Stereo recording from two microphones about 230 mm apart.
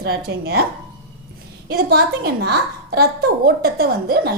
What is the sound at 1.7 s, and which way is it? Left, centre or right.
A woman's voice, right.